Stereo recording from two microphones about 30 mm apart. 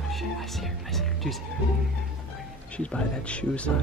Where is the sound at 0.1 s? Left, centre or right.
Centre.